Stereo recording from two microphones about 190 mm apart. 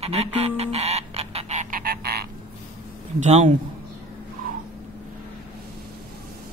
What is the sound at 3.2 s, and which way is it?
Speech, 40° right (ahead or behind).